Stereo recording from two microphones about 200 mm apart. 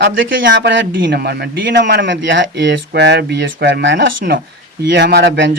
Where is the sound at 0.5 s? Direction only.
65° right (ahead or behind).